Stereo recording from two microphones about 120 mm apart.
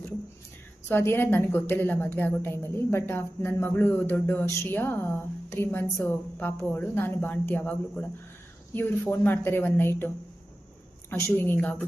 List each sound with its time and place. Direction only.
0.9 s a woman's voice: 20° left (ahead or behind)
11.1 s a woman's voice: 15° left (ahead or behind)